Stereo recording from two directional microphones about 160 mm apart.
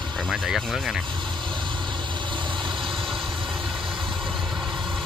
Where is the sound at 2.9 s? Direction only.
Centre (ahead or behind).